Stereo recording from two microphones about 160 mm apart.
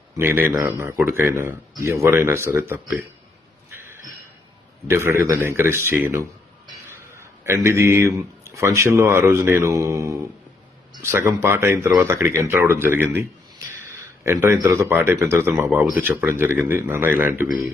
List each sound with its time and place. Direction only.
0.2 s speech: 15° right (ahead or behind)
3.8 s a sound: 15° right (ahead or behind)
4.9 s speech: 15° right (ahead or behind)